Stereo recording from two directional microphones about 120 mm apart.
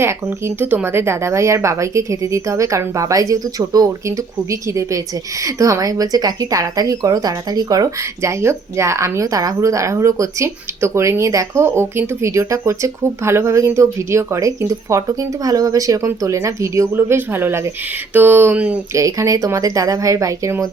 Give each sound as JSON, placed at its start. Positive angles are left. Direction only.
{"t": 0.0, "sound": "speech", "side_deg": -20}
{"t": 18.1, "sound": "a sound", "side_deg": -15}
{"t": 18.9, "sound": "speech", "side_deg": -25}